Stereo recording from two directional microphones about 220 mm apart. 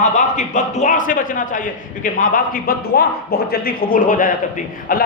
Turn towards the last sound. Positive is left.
turn(degrees=40)  # may be behind; listen again after turning